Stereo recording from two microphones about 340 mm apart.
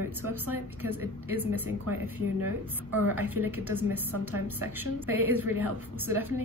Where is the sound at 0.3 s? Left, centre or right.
Centre.